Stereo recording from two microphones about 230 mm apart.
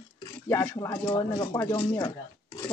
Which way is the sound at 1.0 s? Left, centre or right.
Centre.